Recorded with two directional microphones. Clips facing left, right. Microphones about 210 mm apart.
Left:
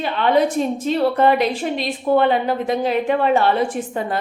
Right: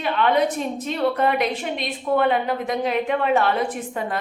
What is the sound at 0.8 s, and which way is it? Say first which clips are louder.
A woman's voice: left 4 dB; 30° left (ahead or behind).